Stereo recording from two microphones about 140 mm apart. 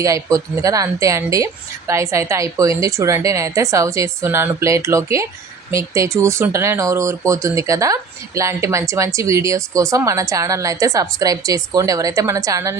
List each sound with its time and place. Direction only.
0.0 s speech: 25° right (ahead or behind)